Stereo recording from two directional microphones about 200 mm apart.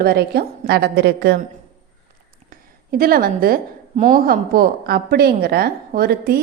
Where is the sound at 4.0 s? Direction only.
30° right (ahead or behind).